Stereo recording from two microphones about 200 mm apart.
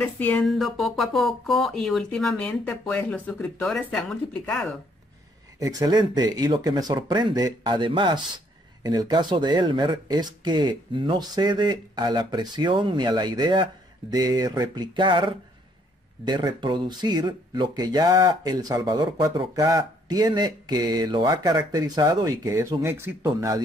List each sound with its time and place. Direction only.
0.0 s speech: 10° left (ahead or behind)
5.6 s speech: 20° right (ahead or behind)